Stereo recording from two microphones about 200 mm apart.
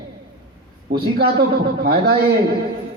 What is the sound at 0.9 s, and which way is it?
A man's voice, 55° right (ahead or behind).